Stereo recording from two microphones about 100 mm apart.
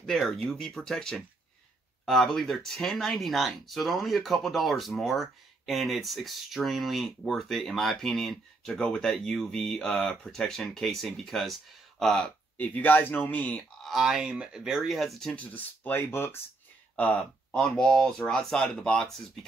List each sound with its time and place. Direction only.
0.0 s speech: centre (ahead or behind)
12.5 s speech: 15° left (ahead or behind)
13.8 s speech: 5° right (ahead or behind)
15.5 s speech: 20° left (ahead or behind)
16.9 s speech: 15° left (ahead or behind)